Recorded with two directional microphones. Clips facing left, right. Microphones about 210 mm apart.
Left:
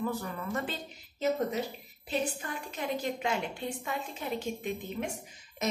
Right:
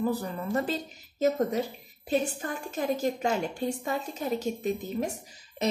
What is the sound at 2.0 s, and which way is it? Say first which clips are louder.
A woman's voice: right 5 dB; 45° right (ahead or behind).